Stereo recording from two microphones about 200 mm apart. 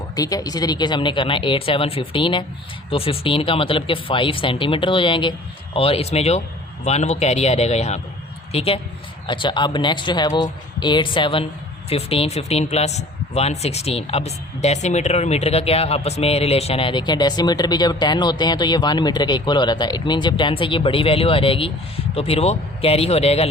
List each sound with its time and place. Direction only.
0.2 s a man's voice: 20° left (ahead or behind)